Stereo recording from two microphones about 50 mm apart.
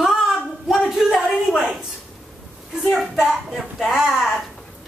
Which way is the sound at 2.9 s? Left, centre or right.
Centre.